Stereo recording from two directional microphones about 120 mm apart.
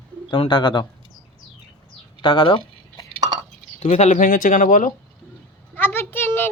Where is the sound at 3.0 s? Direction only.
30° left (ahead or behind).